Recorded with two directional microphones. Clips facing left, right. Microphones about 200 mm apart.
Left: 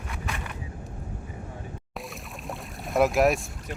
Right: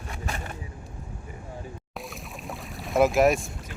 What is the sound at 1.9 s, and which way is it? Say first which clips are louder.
Boat: even; centre (ahead or behind).